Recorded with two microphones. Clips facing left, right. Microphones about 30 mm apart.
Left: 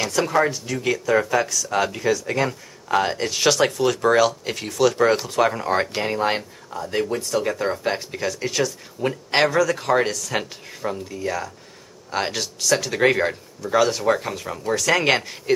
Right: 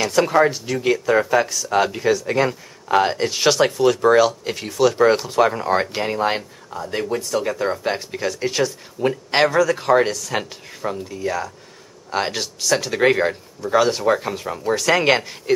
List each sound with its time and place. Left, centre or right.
0.1 s speech: centre
1.5 s speech: right; by 15.5 s centre